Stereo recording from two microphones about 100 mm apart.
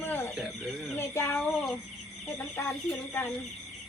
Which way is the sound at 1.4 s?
5° left (ahead or behind).